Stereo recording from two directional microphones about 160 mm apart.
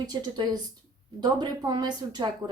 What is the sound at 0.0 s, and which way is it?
Speech, 25° right (ahead or behind).